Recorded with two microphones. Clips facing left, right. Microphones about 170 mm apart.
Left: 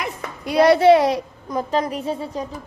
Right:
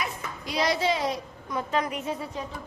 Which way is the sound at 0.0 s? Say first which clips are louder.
Left 5 dB; 65° left (ahead or behind).